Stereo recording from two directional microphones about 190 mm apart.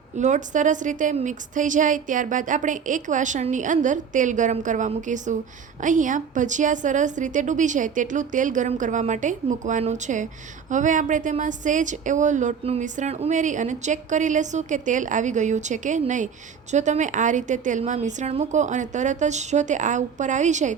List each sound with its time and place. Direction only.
0.2 s a woman's voice: 40° right (ahead or behind)